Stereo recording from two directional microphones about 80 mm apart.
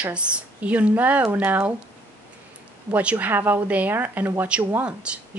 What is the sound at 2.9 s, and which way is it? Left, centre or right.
Speech, centre.